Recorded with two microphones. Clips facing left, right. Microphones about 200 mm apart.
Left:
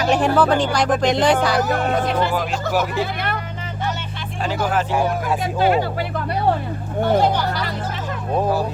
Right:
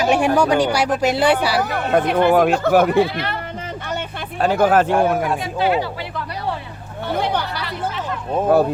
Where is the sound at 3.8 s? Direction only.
55° right (ahead or behind).